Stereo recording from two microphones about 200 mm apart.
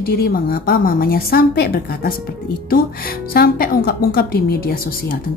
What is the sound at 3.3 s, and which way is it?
A woman's voice, 45° left (ahead or behind).